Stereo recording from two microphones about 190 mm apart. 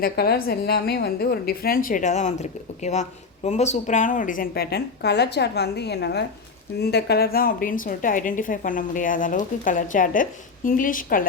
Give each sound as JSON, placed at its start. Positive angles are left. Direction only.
{"t": 0.0, "sound": "a woman's voice", "side_deg": 55}